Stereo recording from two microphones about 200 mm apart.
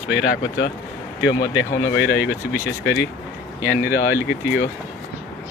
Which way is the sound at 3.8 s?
10° right (ahead or behind).